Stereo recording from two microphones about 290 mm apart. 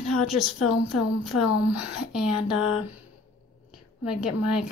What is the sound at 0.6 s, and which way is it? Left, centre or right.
Speech, left.